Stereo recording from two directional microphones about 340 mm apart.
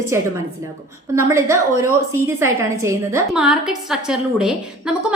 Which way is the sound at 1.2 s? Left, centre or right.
Centre.